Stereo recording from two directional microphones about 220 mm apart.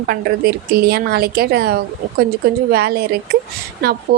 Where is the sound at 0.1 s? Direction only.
45° right (ahead or behind).